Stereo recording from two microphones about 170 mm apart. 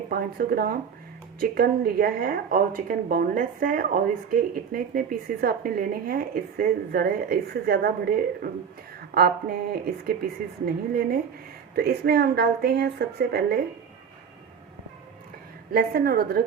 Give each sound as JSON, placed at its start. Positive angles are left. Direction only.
{"t": 0.1, "sound": "speech", "side_deg": -65}
{"t": 15.7, "sound": "speech", "side_deg": -60}